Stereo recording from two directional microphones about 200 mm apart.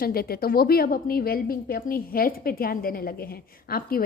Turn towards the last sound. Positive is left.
turn(degrees=50)  # may be behind; listen again after turning